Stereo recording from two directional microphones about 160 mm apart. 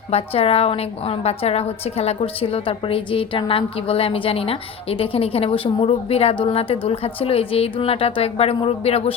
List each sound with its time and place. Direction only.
0.1 s a woman's voice: 40° left (ahead or behind)